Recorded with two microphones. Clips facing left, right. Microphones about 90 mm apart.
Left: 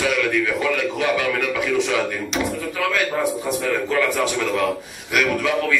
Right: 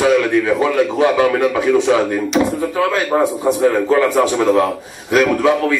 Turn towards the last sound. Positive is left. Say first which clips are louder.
# right 6 dB
turn(degrees=-30)  # may be behind; listen again after turning